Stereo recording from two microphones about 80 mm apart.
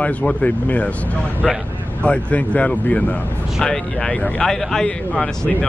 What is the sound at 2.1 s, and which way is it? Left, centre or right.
Speech, centre.